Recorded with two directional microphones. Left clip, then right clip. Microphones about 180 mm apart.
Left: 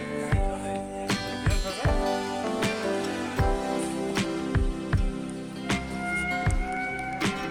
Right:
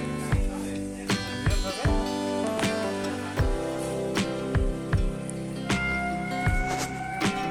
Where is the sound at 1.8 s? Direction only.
Centre (ahead or behind).